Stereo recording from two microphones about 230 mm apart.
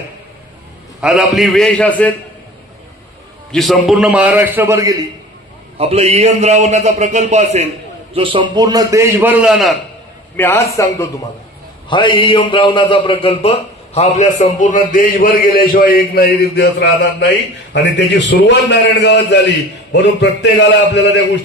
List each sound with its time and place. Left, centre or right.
1.0 s a man's voice: centre
3.5 s a man's voice: centre
5.8 s a man's voice: right; by 9.8 s centre
10.3 s a man's voice: centre; by 21.0 s left